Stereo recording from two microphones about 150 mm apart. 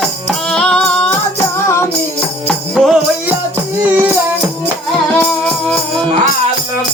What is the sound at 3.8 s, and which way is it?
Music, 10° right (ahead or behind).